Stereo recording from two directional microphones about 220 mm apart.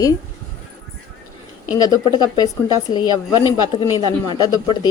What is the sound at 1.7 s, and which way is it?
Speech, 20° left (ahead or behind).